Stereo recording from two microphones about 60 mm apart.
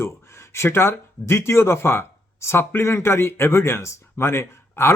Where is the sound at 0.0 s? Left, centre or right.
Left.